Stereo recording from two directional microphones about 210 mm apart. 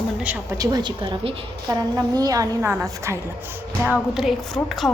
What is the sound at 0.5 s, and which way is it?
A woman's voice, 20° right (ahead or behind).